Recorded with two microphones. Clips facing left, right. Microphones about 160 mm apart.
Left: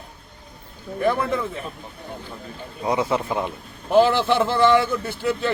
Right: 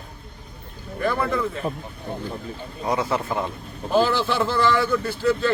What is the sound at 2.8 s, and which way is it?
A man's voice, 20° left (ahead or behind).